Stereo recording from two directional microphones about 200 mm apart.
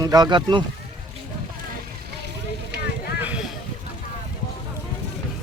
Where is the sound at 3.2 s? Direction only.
5° right (ahead or behind).